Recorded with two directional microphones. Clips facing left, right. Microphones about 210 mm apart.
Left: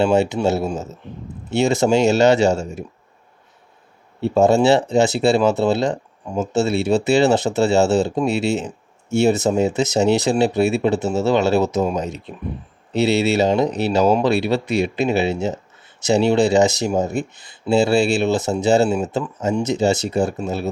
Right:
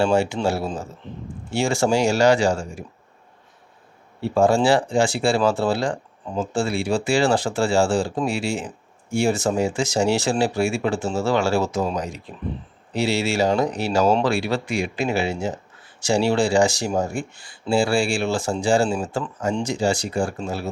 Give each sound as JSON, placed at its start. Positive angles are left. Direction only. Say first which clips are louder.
{"t": 0.0, "sound": "speech", "louder": "left 3 dB", "side_deg": 20}
{"t": 4.2, "sound": "speech", "louder": "left 3 dB", "side_deg": 20}